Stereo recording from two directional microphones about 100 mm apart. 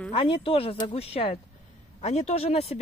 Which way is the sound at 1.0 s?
85° left.